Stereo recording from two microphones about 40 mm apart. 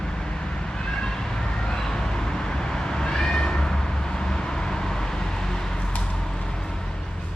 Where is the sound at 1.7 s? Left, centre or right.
Centre.